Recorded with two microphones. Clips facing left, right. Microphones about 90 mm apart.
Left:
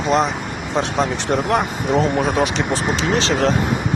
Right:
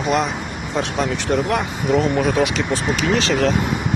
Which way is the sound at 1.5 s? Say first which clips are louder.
Left 1 dB; 35° left (ahead or behind).